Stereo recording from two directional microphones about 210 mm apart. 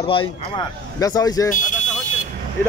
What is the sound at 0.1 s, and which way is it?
Speech, 25° left (ahead or behind).